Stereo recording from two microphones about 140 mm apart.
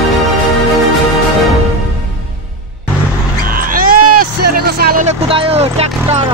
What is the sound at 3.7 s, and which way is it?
Music, 90° right.